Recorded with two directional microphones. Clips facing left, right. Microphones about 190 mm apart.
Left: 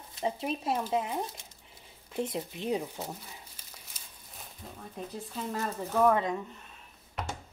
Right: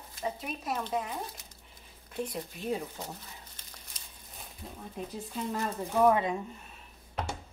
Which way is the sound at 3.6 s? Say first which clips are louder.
Right 1 dB; 10° left (ahead or behind).